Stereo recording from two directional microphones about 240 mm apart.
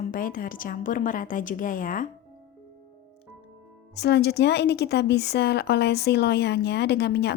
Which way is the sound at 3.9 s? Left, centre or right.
Left.